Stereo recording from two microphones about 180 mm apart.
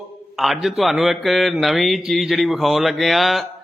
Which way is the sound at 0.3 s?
Centre (ahead or behind).